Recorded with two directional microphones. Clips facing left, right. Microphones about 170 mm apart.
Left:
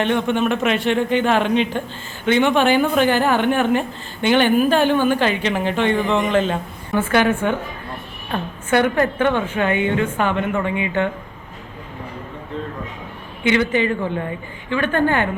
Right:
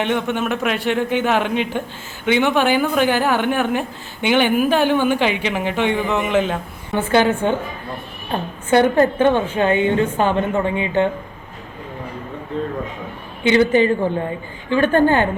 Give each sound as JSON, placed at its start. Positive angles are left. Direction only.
{"t": 0.0, "sound": "a woman's voice", "side_deg": -10}
{"t": 6.9, "sound": "a woman's voice", "side_deg": -25}
{"t": 13.5, "sound": "a woman's voice", "side_deg": -35}